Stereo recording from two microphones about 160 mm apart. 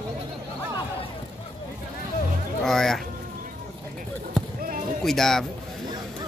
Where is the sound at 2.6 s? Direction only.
Centre (ahead or behind).